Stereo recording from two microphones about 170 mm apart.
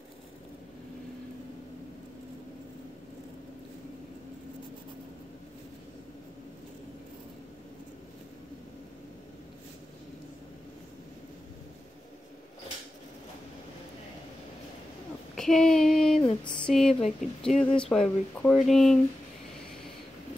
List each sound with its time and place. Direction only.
15.3 s child singing: centre (ahead or behind)
16.6 s speech: 5° left (ahead or behind)
17.0 s speech: 40° left (ahead or behind)
17.7 s speech: 5° left (ahead or behind)